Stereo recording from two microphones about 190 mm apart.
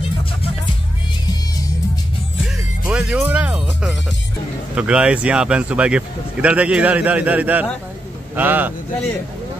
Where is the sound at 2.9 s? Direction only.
5° right (ahead or behind).